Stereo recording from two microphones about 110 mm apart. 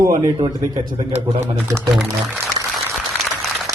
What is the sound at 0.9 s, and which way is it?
Speech, 90° right.